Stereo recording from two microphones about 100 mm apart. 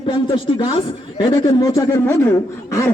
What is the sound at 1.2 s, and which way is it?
Speech, 45° left (ahead or behind).